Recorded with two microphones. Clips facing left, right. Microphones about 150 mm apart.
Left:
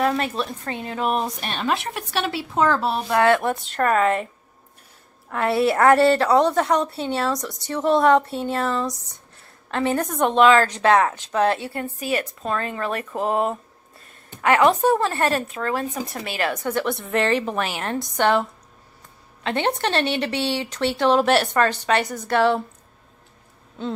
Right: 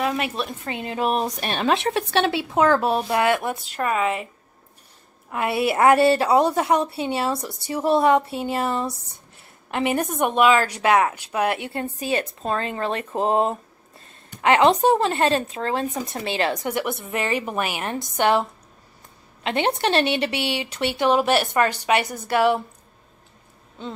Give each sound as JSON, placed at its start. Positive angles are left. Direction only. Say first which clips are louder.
{"t": 0.0, "sound": "speech", "louder": "left 2 dB", "side_deg": -10}
{"t": 1.6, "sound": "speech", "louder": "right 4 dB", "side_deg": -25}
{"t": 5.3, "sound": "speech", "louder": "left 2 dB", "side_deg": -10}
{"t": 11.7, "sound": "speech", "louder": "right 1 dB", "side_deg": -25}
{"t": 19.4, "sound": "speech", "louder": "right 1 dB", "side_deg": -15}